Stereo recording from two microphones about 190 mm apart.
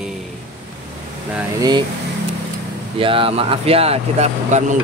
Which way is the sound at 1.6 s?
20° right (ahead or behind).